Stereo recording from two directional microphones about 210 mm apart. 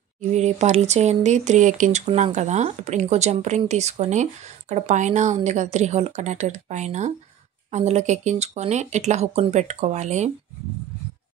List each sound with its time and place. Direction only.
0.2 s speech: 35° right (ahead or behind)